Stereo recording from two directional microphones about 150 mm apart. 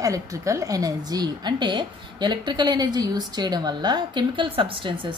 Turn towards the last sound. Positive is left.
turn(degrees=-35)  # may be behind; listen again after turning